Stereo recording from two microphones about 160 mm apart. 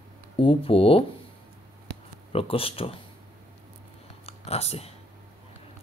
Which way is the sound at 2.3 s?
35° left (ahead or behind).